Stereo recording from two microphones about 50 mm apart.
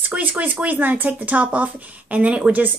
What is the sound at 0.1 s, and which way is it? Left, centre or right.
Speech, right.